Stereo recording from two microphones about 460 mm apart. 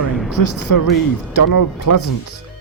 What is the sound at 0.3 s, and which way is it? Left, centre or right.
Speech, left.